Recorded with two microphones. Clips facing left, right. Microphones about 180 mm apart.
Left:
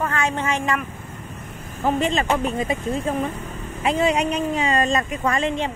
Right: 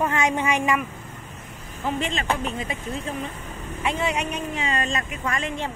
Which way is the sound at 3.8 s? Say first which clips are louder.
Left 6 dB; 35° left (ahead or behind).